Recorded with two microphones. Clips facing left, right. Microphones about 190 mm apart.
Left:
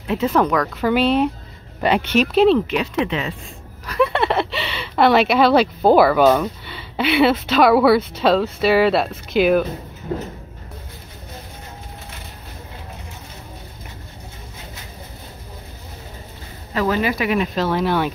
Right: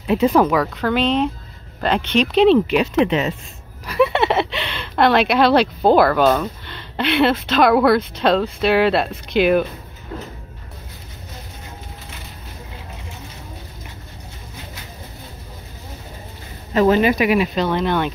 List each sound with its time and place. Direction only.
0.1 s speech: 15° right (ahead or behind)
0.7 s speech: 10° left (ahead or behind)
2.7 s speech: 20° right (ahead or behind)
3.8 s speech: 5° right (ahead or behind)
16.7 s speech: 25° right (ahead or behind)
17.4 s speech: 5° left (ahead or behind)